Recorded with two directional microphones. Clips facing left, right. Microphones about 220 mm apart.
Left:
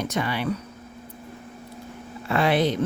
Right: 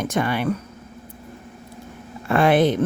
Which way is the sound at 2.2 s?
50° right (ahead or behind).